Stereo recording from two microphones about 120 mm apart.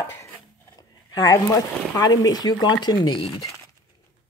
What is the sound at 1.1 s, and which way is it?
Speech, 30° left (ahead or behind).